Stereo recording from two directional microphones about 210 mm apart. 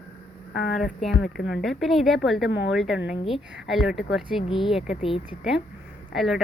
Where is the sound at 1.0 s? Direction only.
Centre (ahead or behind).